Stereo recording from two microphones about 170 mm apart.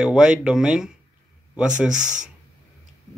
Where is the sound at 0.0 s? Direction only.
5° right (ahead or behind).